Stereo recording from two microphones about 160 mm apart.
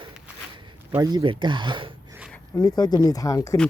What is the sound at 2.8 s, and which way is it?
Speech, 25° left (ahead or behind).